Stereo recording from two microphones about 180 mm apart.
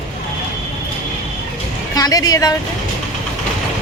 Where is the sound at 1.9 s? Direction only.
20° left (ahead or behind).